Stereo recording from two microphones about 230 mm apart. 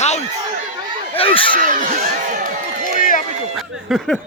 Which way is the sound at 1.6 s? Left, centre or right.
Right.